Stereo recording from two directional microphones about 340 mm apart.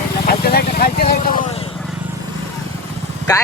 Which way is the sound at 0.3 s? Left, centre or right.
Left.